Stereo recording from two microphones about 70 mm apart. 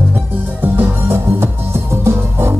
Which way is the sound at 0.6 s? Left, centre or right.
Right.